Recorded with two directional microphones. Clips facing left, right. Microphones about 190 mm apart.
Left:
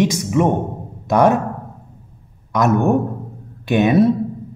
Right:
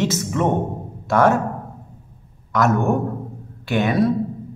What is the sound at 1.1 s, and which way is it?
Speech, 15° left (ahead or behind).